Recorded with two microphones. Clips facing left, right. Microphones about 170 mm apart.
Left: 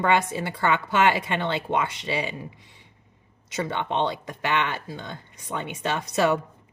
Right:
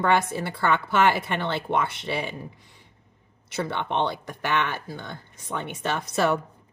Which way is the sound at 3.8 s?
15° left (ahead or behind).